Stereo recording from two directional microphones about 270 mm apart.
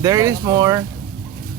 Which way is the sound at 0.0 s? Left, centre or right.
Centre.